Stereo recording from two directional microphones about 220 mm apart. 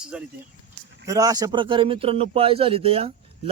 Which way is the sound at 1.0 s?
15° right (ahead or behind).